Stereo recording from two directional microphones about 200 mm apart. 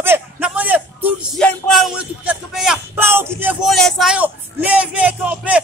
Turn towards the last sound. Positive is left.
turn(degrees=-5)  # may be behind; listen again after turning